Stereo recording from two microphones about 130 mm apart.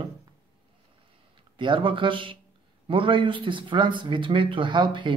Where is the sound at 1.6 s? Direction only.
40° right (ahead or behind).